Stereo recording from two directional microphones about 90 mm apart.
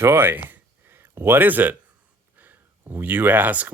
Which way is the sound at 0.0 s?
25° right (ahead or behind).